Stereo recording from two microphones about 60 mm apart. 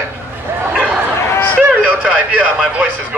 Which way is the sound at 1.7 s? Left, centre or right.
Right.